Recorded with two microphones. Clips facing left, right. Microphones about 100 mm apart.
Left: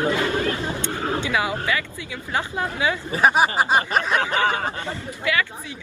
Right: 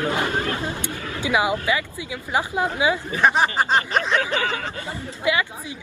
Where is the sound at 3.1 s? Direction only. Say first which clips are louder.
Left 3 dB; 10° left (ahead or behind).